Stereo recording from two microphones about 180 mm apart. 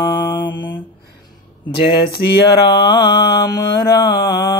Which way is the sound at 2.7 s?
25° left (ahead or behind).